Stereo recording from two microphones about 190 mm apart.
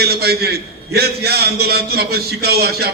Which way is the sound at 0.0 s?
55° right (ahead or behind).